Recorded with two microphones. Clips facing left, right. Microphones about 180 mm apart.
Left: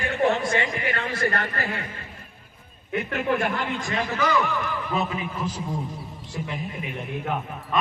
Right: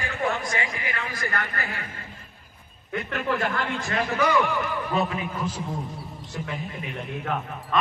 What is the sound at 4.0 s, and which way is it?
A man's voice, 5° left (ahead or behind).